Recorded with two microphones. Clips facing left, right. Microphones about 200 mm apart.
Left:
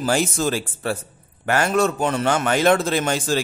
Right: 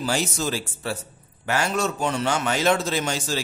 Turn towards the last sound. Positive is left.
turn(degrees=55)  # may be behind; listen again after turning